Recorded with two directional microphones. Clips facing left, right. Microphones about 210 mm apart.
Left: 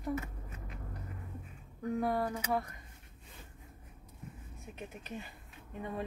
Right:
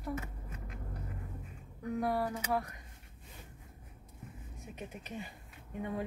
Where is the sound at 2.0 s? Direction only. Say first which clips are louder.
Even; 10° right (ahead or behind).